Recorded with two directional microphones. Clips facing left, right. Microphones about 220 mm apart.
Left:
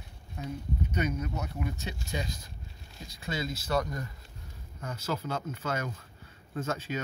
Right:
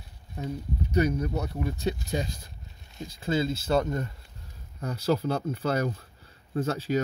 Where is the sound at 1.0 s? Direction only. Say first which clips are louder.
Right 5 dB; 35° right (ahead or behind).